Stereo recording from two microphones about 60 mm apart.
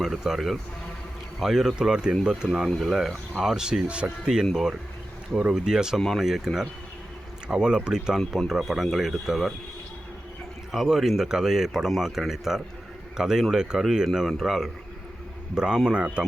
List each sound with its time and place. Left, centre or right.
0.0 s speech: centre
5.5 s speech: centre
10.7 s a man's voice: centre